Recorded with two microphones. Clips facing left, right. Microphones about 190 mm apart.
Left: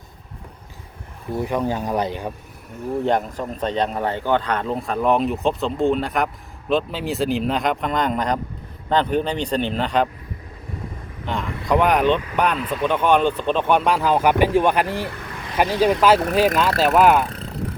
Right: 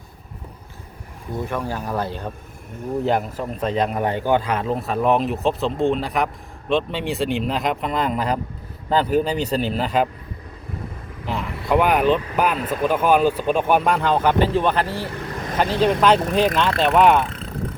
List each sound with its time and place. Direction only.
1.4 s speech: 20° left (ahead or behind)
3.0 s speech: 5° right (ahead or behind)
11.3 s speech: 5° right (ahead or behind)